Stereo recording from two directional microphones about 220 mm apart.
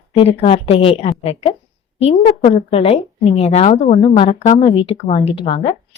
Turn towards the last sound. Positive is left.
turn(degrees=25)  # may be behind; listen again after turning